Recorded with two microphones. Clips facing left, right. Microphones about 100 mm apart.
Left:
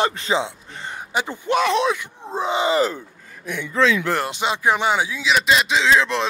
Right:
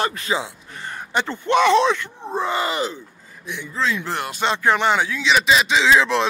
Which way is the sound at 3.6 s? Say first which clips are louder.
Left 5 dB; 80° left.